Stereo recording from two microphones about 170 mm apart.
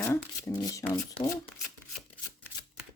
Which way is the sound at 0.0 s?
15° left (ahead or behind).